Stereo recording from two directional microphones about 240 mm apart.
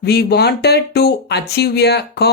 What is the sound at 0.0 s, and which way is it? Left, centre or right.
Speech, left.